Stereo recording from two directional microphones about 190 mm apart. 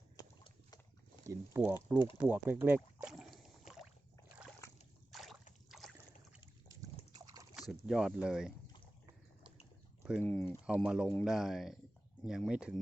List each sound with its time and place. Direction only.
0.2 s a sound: 20° left (ahead or behind)
1.3 s speech: 15° right (ahead or behind)
5.1 s a sound: centre (ahead or behind)
5.6 s boat: centre (ahead or behind)
6.7 s a sound: 20° right (ahead or behind)
7.7 s speech: centre (ahead or behind)
10.0 s speech: 5° right (ahead or behind)
10.2 s speech: 10° left (ahead or behind)
10.7 s speech: 5° right (ahead or behind)